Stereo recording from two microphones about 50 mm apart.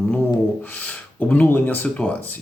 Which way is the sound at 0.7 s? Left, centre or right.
Left.